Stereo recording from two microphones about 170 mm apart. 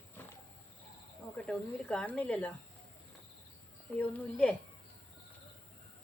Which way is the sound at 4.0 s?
5° left (ahead or behind).